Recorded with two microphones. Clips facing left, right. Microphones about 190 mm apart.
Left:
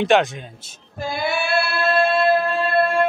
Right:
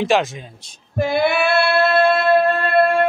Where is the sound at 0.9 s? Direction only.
65° right (ahead or behind).